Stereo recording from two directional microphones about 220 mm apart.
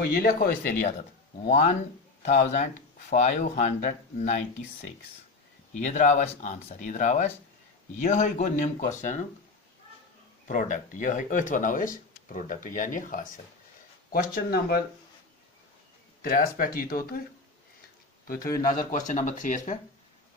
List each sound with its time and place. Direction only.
0.0 s speech: 45° left (ahead or behind)
5.8 s speech: 35° left (ahead or behind)
10.4 s speech: 35° left (ahead or behind)
16.2 s speech: 40° left (ahead or behind)
18.2 s speech: 40° left (ahead or behind)